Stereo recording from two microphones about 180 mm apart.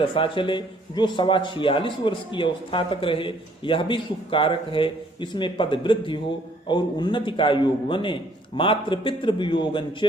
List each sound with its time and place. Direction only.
0.0 s a man's voice: 30° left (ahead or behind)